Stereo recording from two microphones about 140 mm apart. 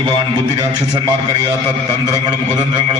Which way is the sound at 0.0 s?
35° right (ahead or behind).